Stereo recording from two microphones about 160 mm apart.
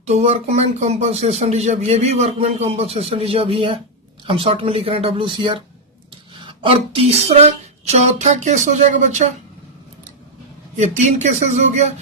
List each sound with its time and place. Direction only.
0.0 s speech: 45° right (ahead or behind)
10.8 s speech: 45° right (ahead or behind)